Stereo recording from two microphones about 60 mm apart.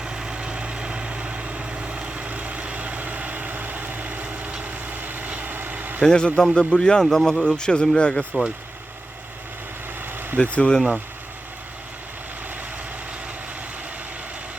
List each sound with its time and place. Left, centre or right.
0.0 s vehicle: centre; by 6.0 s right
6.0 s speech: centre
10.1 s vehicle: right
10.3 s speech: left
10.8 s speech: centre